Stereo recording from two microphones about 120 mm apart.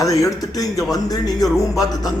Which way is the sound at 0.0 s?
30° left (ahead or behind).